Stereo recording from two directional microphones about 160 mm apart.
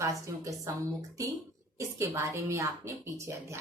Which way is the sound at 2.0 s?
15° right (ahead or behind).